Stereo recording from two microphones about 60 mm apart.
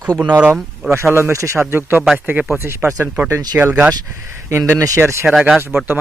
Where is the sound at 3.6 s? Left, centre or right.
Right.